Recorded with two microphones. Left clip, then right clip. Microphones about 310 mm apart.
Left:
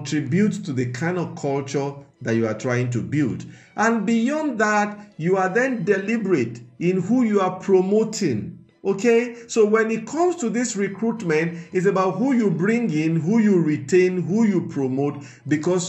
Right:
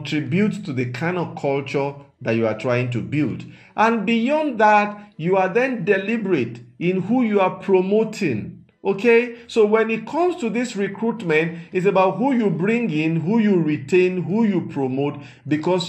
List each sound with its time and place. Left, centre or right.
0.0 s a man's voice: centre